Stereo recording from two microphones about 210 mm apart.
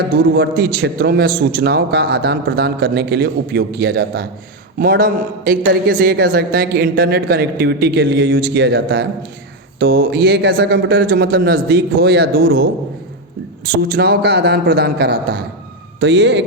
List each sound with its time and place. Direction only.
0.3 s a woman's voice: 45° right (ahead or behind)
13.7 s a woman's voice: 45° right (ahead or behind)